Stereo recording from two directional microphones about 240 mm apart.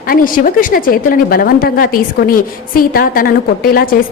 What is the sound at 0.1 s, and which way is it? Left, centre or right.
A woman's voice, left.